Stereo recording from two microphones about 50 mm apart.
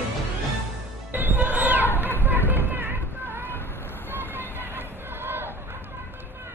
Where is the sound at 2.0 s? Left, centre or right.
Right.